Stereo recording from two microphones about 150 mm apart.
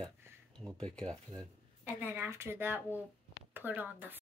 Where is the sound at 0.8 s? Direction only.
5° left (ahead or behind).